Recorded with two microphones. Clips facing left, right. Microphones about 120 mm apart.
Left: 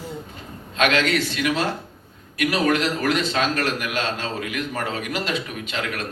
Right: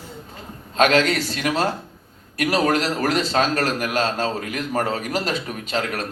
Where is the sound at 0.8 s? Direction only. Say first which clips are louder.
Right 3 dB; 40° right (ahead or behind).